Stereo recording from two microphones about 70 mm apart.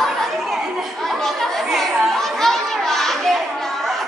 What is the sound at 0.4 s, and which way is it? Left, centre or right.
Chatter, centre.